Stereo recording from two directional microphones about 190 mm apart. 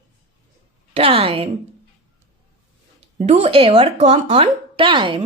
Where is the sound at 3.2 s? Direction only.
35° right (ahead or behind).